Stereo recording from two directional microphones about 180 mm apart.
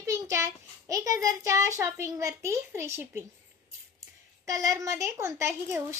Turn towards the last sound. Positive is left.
turn(degrees=-15)  # may be behind; listen again after turning